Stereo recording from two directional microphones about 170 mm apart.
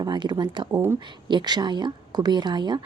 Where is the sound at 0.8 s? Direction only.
15° right (ahead or behind).